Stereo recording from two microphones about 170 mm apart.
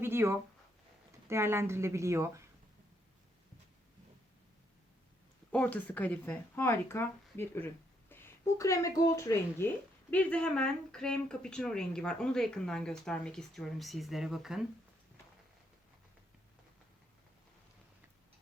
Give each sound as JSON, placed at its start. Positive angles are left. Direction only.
{"t": 0.0, "sound": "a woman's voice", "side_deg": -15}
{"t": 5.5, "sound": "speech", "side_deg": 10}
{"t": 10.1, "sound": "speech", "side_deg": 10}